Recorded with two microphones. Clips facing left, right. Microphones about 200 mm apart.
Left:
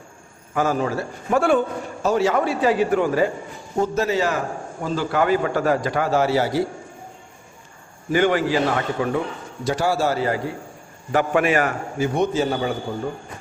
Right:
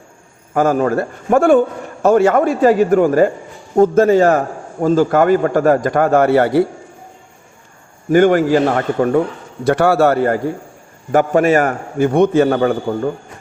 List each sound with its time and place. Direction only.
0.5 s a man's voice: 50° right (ahead or behind)
8.1 s a man's voice: 50° right (ahead or behind)
9.6 s a man's voice: 60° right (ahead or behind)